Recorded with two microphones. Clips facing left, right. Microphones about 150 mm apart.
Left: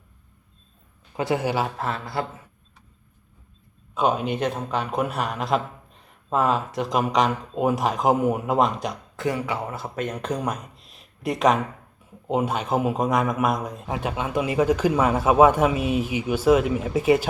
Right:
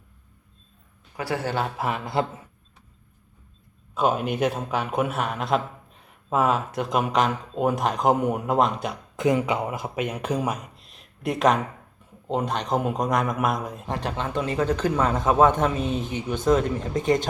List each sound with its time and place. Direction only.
1.1 s speech: 20° left (ahead or behind)
1.7 s speech: 10° right (ahead or behind)
3.9 s a man's voice: centre (ahead or behind)
9.1 s a man's voice: 20° right (ahead or behind); by 17.2 s 5° left (ahead or behind)